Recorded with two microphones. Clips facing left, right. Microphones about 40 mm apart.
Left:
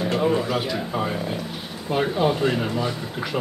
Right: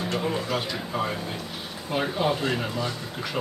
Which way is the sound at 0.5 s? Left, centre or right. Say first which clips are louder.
Left 4 dB; centre.